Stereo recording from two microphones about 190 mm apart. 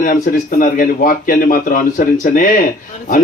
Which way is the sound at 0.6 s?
45° left (ahead or behind).